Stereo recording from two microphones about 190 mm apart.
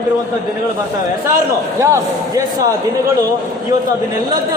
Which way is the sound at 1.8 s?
15° right (ahead or behind).